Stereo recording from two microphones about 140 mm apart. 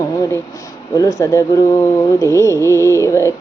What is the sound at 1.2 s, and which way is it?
Child singing, 25° left (ahead or behind).